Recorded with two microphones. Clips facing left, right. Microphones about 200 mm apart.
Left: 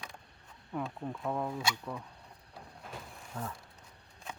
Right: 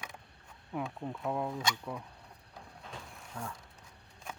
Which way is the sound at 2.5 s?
5° left (ahead or behind).